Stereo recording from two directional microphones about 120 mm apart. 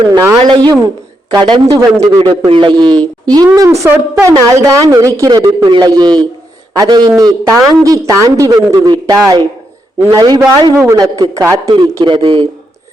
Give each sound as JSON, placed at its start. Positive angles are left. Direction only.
{"t": 0.1, "sound": "a woman's voice", "side_deg": -25}
{"t": 0.4, "sound": "a woman's voice", "side_deg": -40}
{"t": 2.5, "sound": "a woman's voice", "side_deg": -45}
{"t": 11.7, "sound": "a man's voice", "side_deg": -40}